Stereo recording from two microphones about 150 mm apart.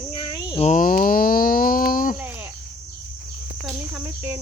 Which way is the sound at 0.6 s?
60° left (ahead or behind).